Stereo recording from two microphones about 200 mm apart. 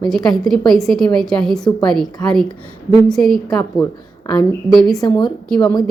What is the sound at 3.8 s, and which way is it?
Speech, 15° left (ahead or behind).